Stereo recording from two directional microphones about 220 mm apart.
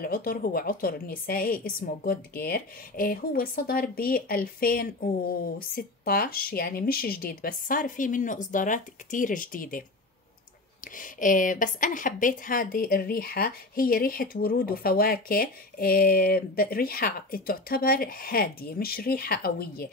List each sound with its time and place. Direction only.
0.0 s a woman's voice: 40° left (ahead or behind)
11.0 s a woman's voice: 35° left (ahead or behind)